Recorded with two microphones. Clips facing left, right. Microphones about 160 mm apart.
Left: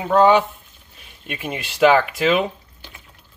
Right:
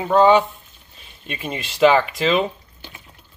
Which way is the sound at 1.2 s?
5° left (ahead or behind).